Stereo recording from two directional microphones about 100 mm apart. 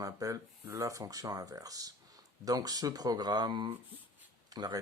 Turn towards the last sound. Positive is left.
turn(degrees=-40)  # may be behind; listen again after turning